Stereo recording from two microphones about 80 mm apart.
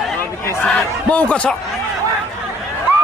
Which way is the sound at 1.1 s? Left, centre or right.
Centre.